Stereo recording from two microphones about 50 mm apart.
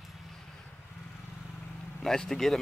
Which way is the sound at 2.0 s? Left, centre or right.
Centre.